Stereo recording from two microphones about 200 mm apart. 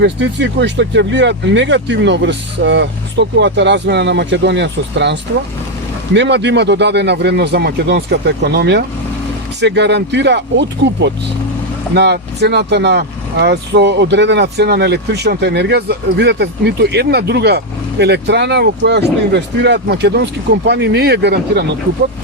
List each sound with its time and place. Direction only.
0.0 s speech: 60° right (ahead or behind)
6.1 s speech: 60° right (ahead or behind)